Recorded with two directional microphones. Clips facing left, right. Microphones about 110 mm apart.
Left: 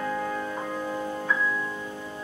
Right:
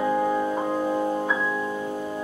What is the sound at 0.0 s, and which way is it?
Music, 15° right (ahead or behind).